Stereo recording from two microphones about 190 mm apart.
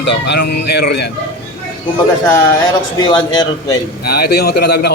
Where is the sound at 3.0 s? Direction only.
20° left (ahead or behind).